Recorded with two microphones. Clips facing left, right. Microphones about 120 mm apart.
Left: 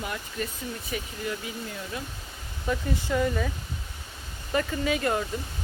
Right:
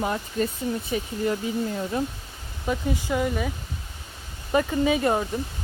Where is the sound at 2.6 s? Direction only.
20° right (ahead or behind).